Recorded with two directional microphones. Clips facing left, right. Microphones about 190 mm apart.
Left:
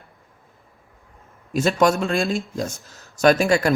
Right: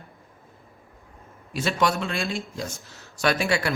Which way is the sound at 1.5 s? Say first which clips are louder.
Left 6 dB; 45° left (ahead or behind).